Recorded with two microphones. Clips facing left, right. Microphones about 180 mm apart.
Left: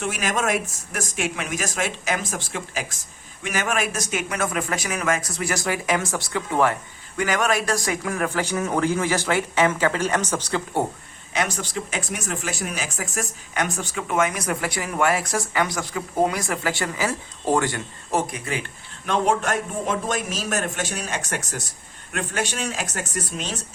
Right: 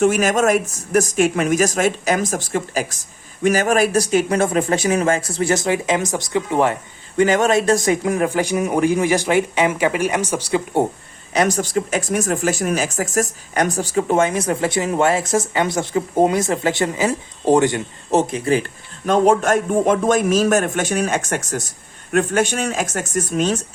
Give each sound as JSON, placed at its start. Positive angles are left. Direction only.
{"t": 0.0, "sound": "speech", "side_deg": -45}
{"t": 11.3, "sound": "speech", "side_deg": -40}